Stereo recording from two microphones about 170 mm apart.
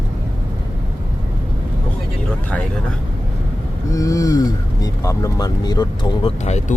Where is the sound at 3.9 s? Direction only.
20° left (ahead or behind).